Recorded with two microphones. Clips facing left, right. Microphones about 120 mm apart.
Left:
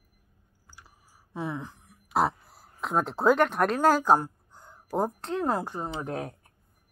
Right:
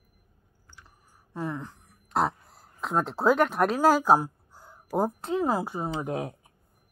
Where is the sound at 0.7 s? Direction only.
5° left (ahead or behind); by 6.5 s 15° right (ahead or behind).